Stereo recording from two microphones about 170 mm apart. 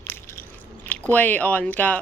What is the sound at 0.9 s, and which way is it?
Speech, 10° left (ahead or behind).